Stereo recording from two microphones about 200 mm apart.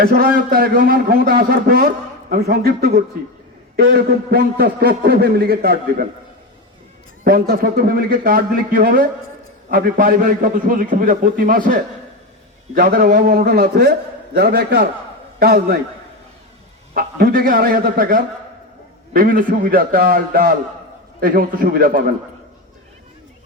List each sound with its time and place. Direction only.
0.0 s a man's voice: 45° right (ahead or behind)
7.3 s a man's voice: 50° right (ahead or behind)
16.9 s a man's voice: 50° right (ahead or behind)